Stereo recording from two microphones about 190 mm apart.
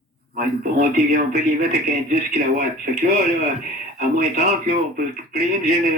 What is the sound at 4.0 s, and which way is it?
Speech, 50° right (ahead or behind).